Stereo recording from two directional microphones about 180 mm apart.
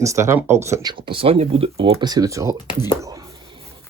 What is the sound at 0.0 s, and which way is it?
Speech, 15° right (ahead or behind).